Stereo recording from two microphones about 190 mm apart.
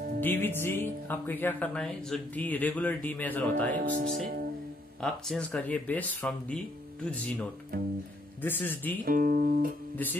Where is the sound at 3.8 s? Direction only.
45° right (ahead or behind).